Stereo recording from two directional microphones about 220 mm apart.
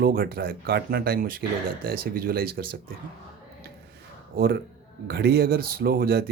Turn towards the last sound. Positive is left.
turn(degrees=-45)  # may be behind; listen again after turning